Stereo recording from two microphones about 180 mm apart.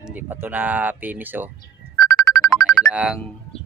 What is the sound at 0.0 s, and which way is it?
Speech, 10° right (ahead or behind).